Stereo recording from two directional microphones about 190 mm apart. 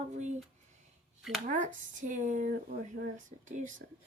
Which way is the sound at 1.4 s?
45° right (ahead or behind).